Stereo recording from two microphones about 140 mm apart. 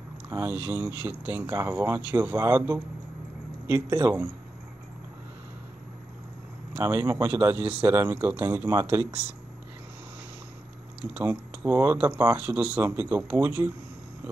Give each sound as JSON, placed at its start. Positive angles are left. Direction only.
{"t": 0.3, "sound": "speech", "side_deg": -15}
{"t": 6.7, "sound": "speech", "side_deg": -20}
{"t": 11.1, "sound": "speech", "side_deg": -15}